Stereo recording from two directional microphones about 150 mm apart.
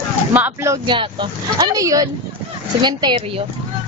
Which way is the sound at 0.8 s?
30° right (ahead or behind).